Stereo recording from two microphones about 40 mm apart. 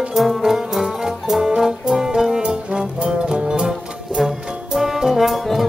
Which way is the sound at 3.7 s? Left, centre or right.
Centre.